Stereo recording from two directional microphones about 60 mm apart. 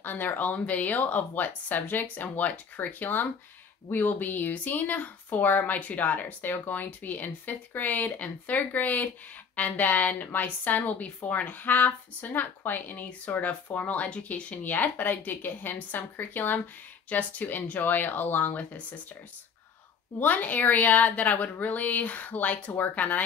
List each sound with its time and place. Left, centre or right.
0.0 s speech: left
20.2 s speech: left